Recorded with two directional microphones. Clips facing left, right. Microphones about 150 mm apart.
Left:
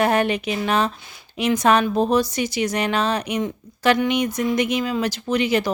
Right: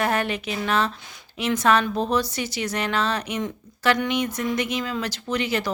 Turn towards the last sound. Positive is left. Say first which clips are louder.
# left 5 dB
turn(degrees=15)  # may be behind; listen again after turning